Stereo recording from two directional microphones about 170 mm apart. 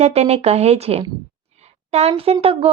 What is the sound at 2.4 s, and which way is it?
Speech, 35° right (ahead or behind).